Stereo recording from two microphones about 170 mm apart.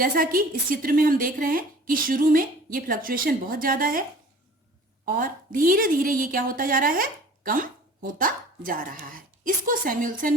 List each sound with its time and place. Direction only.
0.0 s a woman's voice: 55° right (ahead or behind)
5.0 s a woman's voice: 55° right (ahead or behind)